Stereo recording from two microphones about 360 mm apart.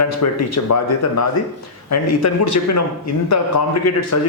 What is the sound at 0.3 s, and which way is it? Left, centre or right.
A man's voice, left.